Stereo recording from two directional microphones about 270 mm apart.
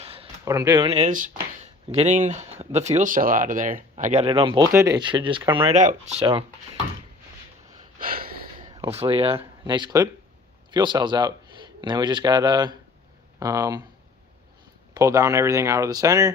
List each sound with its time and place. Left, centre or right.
0.0 s speech: right
7.9 s gasp: right
8.7 s speech: centre
14.9 s speech: centre